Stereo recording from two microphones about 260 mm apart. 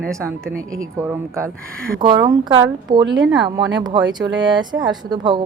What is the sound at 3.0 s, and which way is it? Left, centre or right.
Speech, right.